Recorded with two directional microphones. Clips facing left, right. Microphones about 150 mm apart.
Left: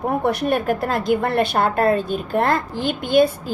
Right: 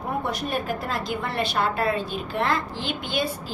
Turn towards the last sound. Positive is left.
turn(degrees=50)  # may be behind; listen again after turning